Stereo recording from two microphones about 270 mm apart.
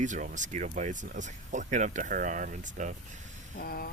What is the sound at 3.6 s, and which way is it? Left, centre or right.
Speech, left.